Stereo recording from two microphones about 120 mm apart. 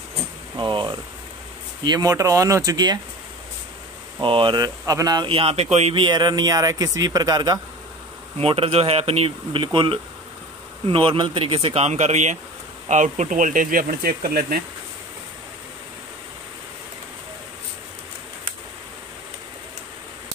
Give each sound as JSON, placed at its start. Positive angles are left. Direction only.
{"t": 0.6, "sound": "speech", "side_deg": -40}
{"t": 4.2, "sound": "speech", "side_deg": -45}
{"t": 5.3, "sound": "speech", "side_deg": -55}
{"t": 5.9, "sound": "speech", "side_deg": -35}
{"t": 8.4, "sound": "speech", "side_deg": -50}